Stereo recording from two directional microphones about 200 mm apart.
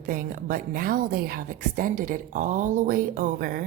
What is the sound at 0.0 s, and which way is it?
A woman's voice, 45° right (ahead or behind).